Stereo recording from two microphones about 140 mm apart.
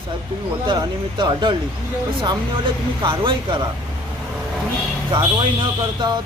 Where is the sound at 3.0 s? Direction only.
35° right (ahead or behind).